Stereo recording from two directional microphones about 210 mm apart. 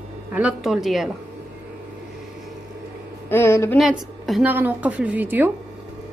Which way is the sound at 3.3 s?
10° left (ahead or behind).